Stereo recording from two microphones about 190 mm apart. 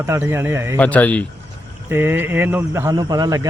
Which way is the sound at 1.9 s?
10° right (ahead or behind).